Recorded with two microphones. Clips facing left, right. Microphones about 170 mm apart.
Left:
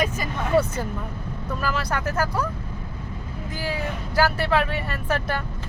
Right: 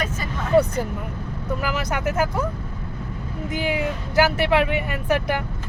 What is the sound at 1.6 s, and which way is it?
Speech, 20° right (ahead or behind).